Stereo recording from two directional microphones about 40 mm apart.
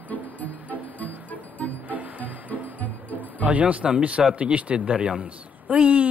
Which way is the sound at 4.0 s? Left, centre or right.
Right.